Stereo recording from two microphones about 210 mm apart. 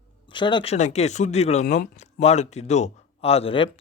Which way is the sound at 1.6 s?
40° left (ahead or behind).